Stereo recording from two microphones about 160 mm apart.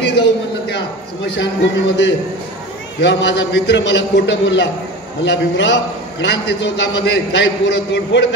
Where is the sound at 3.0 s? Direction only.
90° left.